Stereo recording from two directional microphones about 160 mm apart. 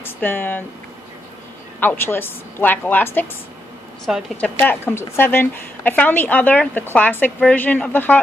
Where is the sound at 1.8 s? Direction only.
10° left (ahead or behind).